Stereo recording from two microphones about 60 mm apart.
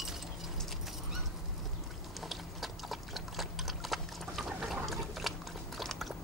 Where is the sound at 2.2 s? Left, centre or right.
Centre.